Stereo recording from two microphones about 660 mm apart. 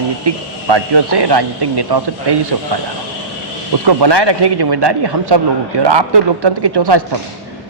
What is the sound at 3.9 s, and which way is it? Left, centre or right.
A man's voice, right.